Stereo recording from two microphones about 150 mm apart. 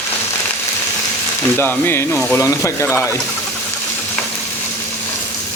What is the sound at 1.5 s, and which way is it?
Speech, 15° left (ahead or behind).